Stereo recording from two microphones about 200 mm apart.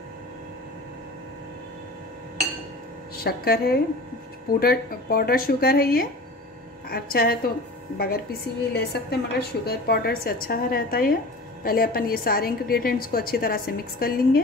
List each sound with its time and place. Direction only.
3.3 s a woman's voice: 50° left (ahead or behind)